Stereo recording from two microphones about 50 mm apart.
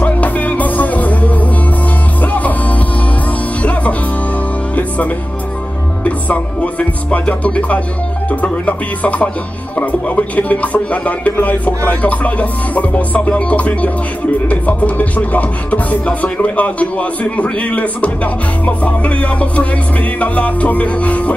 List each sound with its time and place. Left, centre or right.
0.0 s music: left
4.7 s music: left